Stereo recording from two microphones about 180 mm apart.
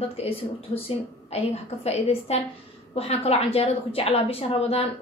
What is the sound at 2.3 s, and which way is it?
A woman's voice, 35° left (ahead or behind).